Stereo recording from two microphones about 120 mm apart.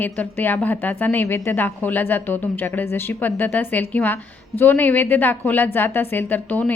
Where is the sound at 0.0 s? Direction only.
15° left (ahead or behind).